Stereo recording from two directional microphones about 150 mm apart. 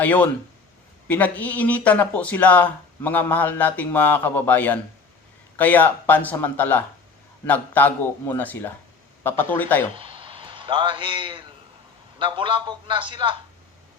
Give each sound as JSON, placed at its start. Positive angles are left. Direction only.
{"t": 0.0, "sound": "speech", "side_deg": 10}
{"t": 10.0, "sound": "a man's voice", "side_deg": -35}